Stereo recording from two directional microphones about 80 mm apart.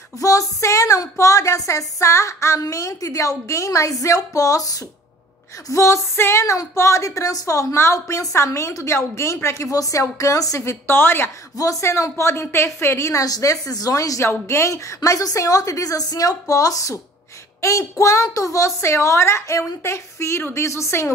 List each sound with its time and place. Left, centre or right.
0.2 s a woman's voice: left
11.5 s speech: left
15.0 s a woman's voice: left